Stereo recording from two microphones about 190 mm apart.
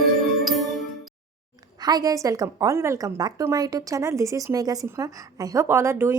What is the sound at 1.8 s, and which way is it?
A woman's voice, 20° right (ahead or behind).